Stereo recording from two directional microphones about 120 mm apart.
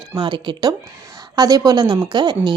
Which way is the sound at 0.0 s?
40° right (ahead or behind).